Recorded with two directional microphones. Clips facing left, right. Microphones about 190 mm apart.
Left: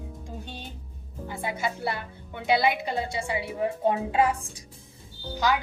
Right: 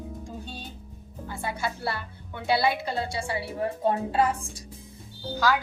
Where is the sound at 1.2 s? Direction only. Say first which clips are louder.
Left 1 dB; 20° left (ahead or behind).